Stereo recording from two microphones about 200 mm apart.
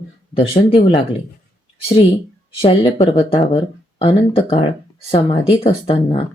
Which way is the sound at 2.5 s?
25° left (ahead or behind).